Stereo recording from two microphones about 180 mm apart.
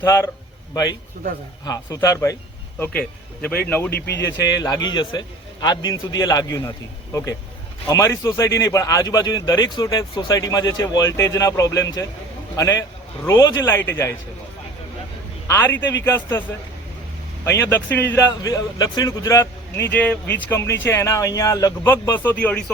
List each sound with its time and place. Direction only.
0.0 s a man's voice: 20° left (ahead or behind)
3.9 s speech: 65° left (ahead or behind)
4.3 s a man's voice: 20° left (ahead or behind)
15.4 s a man's voice: 15° left (ahead or behind)
17.4 s a man's voice: 15° left (ahead or behind)